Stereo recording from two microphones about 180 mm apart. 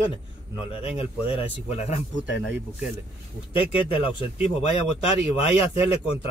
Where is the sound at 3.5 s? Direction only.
30° left (ahead or behind).